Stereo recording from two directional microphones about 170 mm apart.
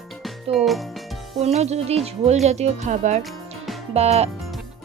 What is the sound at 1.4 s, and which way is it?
Speech, 40° right (ahead or behind).